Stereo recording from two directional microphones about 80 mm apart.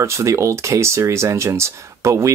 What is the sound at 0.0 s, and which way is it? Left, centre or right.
Speech, right.